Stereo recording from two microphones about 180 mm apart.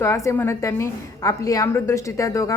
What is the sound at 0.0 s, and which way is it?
A woman's voice, 15° left (ahead or behind).